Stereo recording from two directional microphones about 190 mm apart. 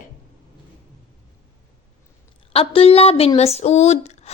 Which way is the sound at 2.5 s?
30° left (ahead or behind).